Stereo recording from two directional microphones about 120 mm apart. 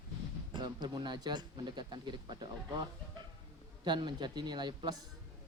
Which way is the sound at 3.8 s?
40° right (ahead or behind).